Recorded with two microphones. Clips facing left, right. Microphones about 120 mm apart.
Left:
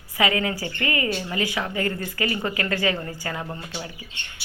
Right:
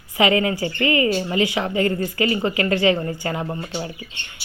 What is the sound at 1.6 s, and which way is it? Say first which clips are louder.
Speech: right 6 dB; 30° right (ahead or behind).